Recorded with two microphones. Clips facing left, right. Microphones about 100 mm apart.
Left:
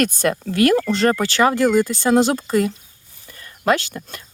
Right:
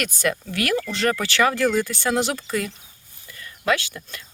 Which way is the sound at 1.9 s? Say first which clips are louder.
Left 7 dB; 35° left (ahead or behind).